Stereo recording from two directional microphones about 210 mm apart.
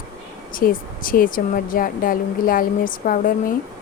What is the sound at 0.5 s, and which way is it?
A woman's voice, 40° left (ahead or behind).